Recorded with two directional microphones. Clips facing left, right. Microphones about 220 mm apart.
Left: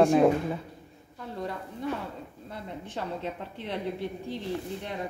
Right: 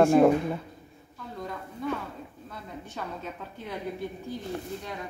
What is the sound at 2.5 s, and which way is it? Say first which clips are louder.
A woman's voice: left 4 dB; 30° left (ahead or behind).